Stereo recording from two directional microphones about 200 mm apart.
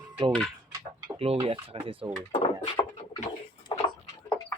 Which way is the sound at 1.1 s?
30° right (ahead or behind).